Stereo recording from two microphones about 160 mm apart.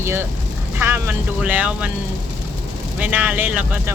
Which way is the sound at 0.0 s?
15° right (ahead or behind).